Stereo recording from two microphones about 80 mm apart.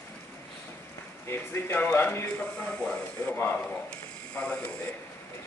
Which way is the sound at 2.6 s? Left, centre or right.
Centre.